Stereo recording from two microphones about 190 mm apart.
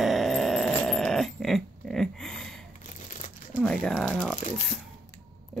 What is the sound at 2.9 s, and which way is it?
Crumpling, 40° left (ahead or behind).